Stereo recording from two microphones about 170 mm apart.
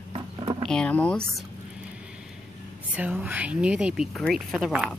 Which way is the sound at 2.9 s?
10° right (ahead or behind).